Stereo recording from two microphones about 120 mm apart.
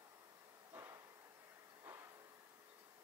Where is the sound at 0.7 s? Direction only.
15° right (ahead or behind).